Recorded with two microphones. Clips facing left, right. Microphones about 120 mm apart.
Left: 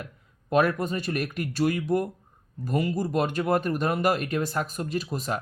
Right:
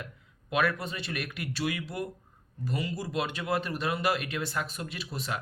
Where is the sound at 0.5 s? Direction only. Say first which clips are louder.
Left 6 dB; 40° left (ahead or behind).